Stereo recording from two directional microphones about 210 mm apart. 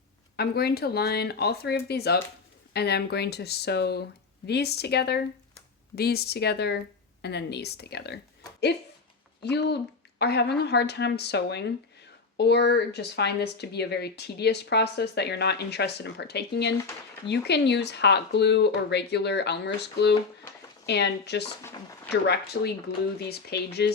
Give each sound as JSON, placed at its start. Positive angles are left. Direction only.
{"t": 0.3, "sound": "a woman's voice", "side_deg": 50}
{"t": 9.4, "sound": "a woman's voice", "side_deg": 50}
{"t": 21.6, "sound": "speech", "side_deg": 10}
{"t": 22.1, "sound": "a woman's voice", "side_deg": 50}